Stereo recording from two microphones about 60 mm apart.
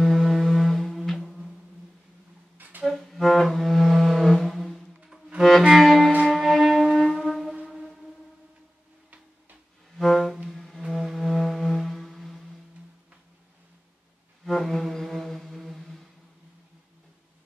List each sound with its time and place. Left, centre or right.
0.0 s music: centre
2.5 s a sound: right
2.9 s music: centre
6.2 s shofar: centre
7.6 s music: centre
9.9 s music: centre
14.4 s music: centre